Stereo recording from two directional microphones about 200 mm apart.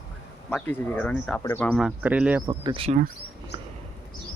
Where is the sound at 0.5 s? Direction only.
10° left (ahead or behind).